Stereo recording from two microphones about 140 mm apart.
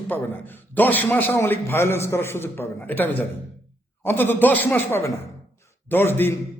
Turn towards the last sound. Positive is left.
turn(degrees=15)  # may be behind; listen again after turning